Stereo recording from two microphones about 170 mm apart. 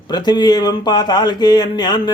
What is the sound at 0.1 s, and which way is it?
Speech, 25° left (ahead or behind).